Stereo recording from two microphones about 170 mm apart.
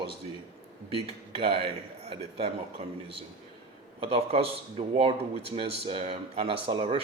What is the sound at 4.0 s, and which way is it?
Speech, 35° right (ahead or behind).